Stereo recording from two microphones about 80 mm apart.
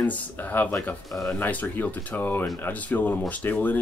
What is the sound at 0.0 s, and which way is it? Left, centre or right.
Speech, left.